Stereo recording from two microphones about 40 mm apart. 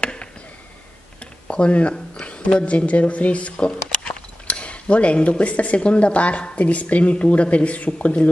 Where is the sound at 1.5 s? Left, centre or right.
Left.